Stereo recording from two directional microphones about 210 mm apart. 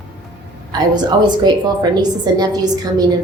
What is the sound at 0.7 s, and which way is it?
A woman's voice, 20° right (ahead or behind).